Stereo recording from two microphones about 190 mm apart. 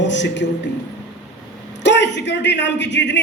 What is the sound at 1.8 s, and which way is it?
A man's voice, 65° left (ahead or behind).